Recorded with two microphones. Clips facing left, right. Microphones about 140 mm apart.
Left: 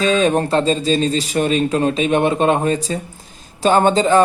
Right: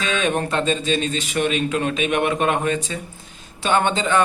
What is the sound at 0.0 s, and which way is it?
Speech, 35° left (ahead or behind).